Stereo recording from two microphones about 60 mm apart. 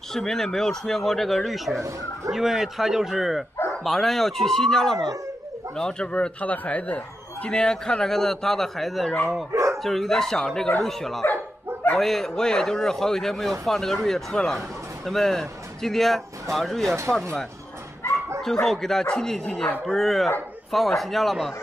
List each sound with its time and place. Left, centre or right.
0.1 s speech: centre
1.8 s speech: right
2.3 s a man's voice: centre; by 7.0 s left
7.4 s speech: centre
9.5 s dog: right
9.8 s speech: centre
18.4 s speech: centre